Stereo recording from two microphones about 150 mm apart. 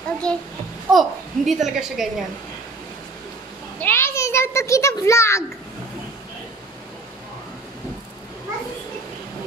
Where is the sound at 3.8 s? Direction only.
15° left (ahead or behind).